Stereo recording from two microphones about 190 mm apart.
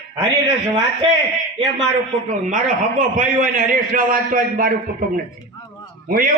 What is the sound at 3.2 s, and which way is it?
A man's voice, 45° right (ahead or behind).